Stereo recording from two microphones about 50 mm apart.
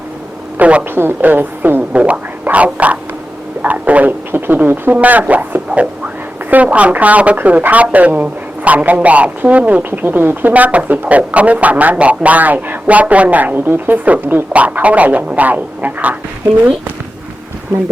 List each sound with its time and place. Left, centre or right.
0.6 s speech: right
0.9 s a woman's voice: right
1.9 s a sound: right
2.7 s speech: right
4.3 s speech: right